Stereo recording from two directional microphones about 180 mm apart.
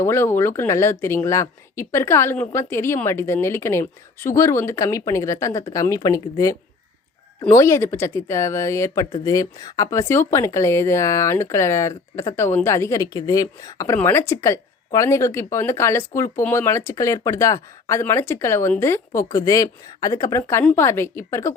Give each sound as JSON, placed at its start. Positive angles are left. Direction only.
{"t": 0.0, "sound": "speech", "side_deg": 15}